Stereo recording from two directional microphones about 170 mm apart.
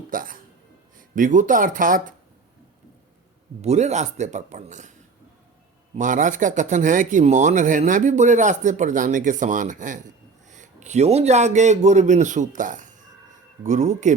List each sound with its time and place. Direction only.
0.1 s speech: 55° right (ahead or behind)
3.6 s speech: 40° right (ahead or behind)
6.0 s speech: 50° right (ahead or behind)